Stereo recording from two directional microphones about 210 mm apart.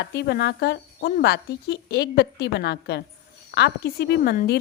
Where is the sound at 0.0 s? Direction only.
55° left (ahead or behind).